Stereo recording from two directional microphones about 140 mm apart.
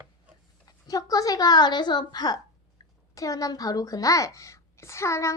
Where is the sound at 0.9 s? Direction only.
25° left (ahead or behind).